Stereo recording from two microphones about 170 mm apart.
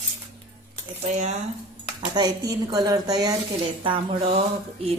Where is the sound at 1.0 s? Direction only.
45° right (ahead or behind).